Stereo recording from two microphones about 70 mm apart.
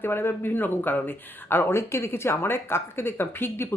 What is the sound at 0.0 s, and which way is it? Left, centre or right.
Speech, left.